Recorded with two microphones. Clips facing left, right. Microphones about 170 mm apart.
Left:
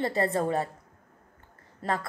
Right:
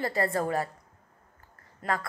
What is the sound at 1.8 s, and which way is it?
Speech, 30° left (ahead or behind).